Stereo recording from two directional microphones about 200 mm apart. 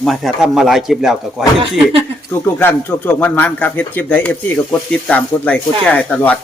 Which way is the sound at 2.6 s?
10° left (ahead or behind).